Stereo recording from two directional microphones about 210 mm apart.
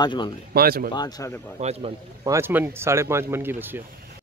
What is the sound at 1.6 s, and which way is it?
Speech, 30° right (ahead or behind).